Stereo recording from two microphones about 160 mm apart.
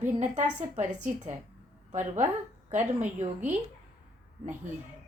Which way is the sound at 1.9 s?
50° right (ahead or behind).